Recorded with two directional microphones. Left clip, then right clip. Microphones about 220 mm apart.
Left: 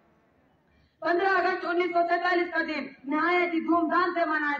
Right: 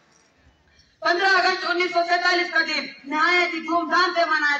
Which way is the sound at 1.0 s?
45° left (ahead or behind).